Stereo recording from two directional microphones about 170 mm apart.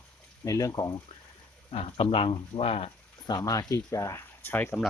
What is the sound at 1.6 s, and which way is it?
Speech, 30° left (ahead or behind).